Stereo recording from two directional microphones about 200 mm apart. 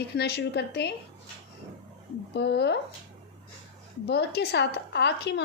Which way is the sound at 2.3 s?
60° left (ahead or behind).